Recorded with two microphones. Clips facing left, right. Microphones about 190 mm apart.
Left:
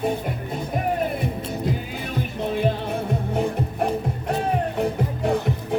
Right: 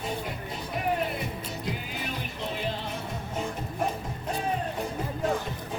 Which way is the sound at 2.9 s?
60° left (ahead or behind).